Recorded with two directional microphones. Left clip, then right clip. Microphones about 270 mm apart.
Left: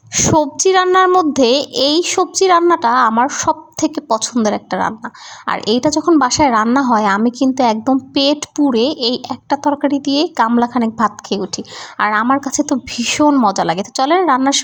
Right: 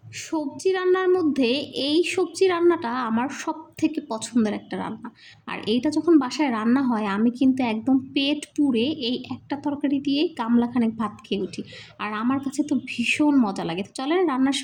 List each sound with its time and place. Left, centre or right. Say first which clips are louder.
0.1 s a woman's voice: left 16 dB; left